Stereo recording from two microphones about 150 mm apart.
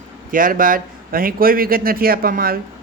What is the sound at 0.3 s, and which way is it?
A man's voice, 65° right (ahead or behind).